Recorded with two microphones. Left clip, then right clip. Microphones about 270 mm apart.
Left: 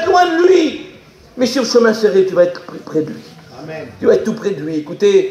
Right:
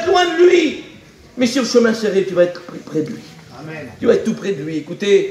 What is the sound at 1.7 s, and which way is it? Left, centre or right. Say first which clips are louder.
Speech: left 4 dB; left.